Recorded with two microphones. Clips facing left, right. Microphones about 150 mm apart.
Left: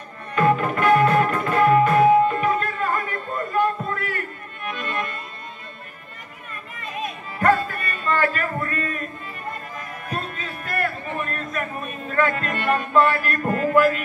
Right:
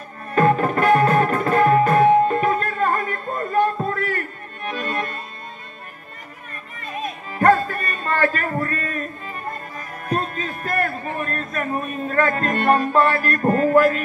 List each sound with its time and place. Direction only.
0.3 s music: 40° right (ahead or behind)
7.3 s a sound: 40° right (ahead or behind)
12.1 s music: 40° right (ahead or behind)